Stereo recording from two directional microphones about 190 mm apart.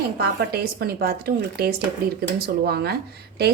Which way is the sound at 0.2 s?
55° right (ahead or behind).